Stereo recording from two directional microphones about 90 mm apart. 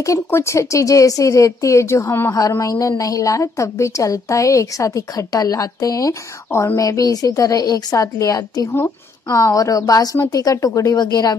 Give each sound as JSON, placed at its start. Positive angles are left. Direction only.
{"t": 0.0, "sound": "a woman's voice", "side_deg": 35}
{"t": 2.5, "sound": "a woman's voice", "side_deg": 40}
{"t": 8.7, "sound": "a woman's voice", "side_deg": 35}
{"t": 11.0, "sound": "speech", "side_deg": 50}